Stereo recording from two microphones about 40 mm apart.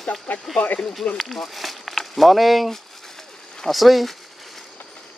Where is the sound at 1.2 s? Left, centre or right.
Centre.